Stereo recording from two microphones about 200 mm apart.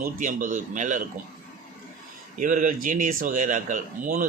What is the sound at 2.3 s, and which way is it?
A man's voice, 40° right (ahead or behind).